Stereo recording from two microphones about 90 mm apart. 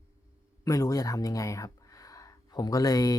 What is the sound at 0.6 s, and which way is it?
Speech, 40° left (ahead or behind).